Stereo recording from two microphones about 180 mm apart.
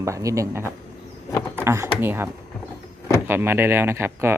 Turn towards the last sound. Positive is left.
turn(degrees=-15)  # may be behind; listen again after turning